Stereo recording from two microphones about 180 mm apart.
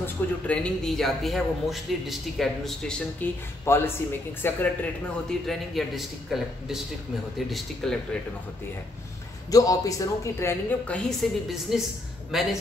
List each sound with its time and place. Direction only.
0.0 s a man's voice: 5° left (ahead or behind)
5.5 s a man's voice: centre (ahead or behind)
9.5 s a woman's voice: 20° left (ahead or behind)
11.1 s a man's voice: centre (ahead or behind)